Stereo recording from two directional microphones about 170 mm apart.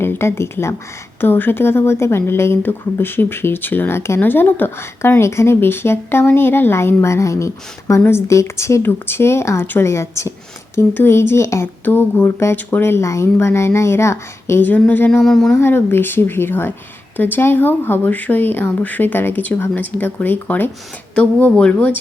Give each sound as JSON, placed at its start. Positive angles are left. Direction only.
{"t": 0.0, "sound": "a woman's voice", "side_deg": 15}
{"t": 15.5, "sound": "a woman's voice", "side_deg": 15}